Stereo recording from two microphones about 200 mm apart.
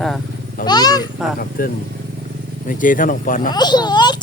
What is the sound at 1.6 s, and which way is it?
Speech, 45° left (ahead or behind).